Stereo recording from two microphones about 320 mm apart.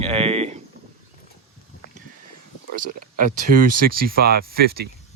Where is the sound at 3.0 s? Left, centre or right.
Right.